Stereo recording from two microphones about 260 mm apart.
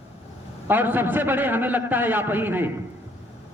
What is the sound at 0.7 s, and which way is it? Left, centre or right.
A man's voice, centre.